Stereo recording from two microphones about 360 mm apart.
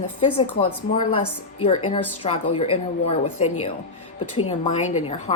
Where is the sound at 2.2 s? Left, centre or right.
Centre.